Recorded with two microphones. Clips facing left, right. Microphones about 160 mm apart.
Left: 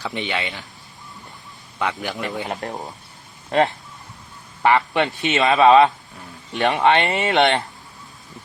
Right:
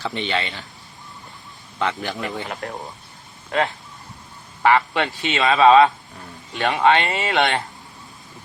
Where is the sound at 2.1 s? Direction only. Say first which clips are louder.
Left 1 dB; centre (ahead or behind).